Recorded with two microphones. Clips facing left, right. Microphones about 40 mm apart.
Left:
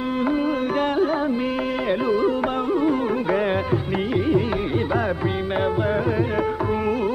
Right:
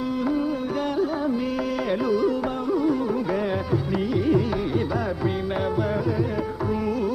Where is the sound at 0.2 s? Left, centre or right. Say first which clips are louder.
Left 4 dB; left.